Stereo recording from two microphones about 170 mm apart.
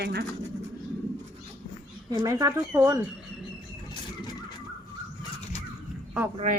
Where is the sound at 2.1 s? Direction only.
20° right (ahead or behind).